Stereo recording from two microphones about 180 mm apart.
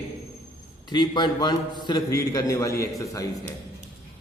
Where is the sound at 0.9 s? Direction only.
25° left (ahead or behind).